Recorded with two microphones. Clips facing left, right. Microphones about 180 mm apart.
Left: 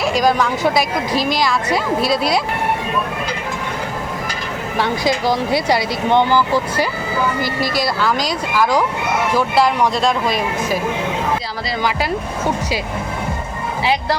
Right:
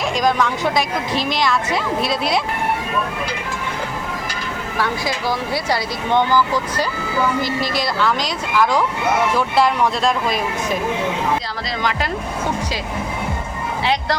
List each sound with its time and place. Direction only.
0.1 s speech: 5° left (ahead or behind)
4.8 s speech: 20° left (ahead or behind)
7.4 s speech: 5° left (ahead or behind)